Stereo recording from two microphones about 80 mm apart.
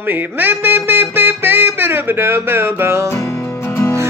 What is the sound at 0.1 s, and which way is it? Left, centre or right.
Music, right.